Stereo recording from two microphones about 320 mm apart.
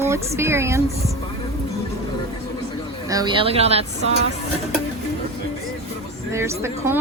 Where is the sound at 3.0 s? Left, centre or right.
Centre.